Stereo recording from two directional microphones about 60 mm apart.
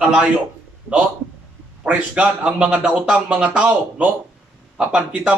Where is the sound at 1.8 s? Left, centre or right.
Right.